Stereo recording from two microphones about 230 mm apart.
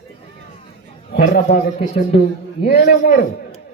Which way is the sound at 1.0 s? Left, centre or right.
Left.